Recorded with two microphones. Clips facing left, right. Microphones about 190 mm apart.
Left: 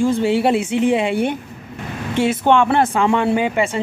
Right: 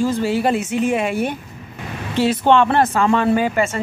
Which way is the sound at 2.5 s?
10° left (ahead or behind).